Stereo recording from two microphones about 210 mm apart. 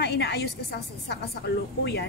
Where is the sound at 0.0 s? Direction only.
50° left (ahead or behind).